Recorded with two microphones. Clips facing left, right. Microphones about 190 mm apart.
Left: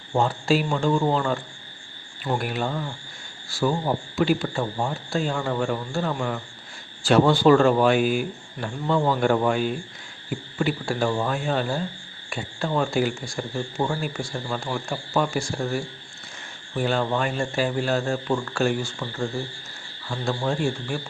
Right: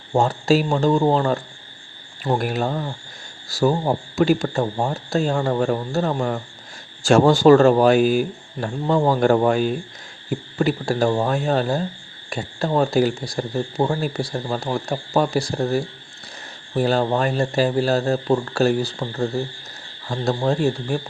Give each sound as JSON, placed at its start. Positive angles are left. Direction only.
{"t": 0.1, "sound": "speech", "side_deg": -40}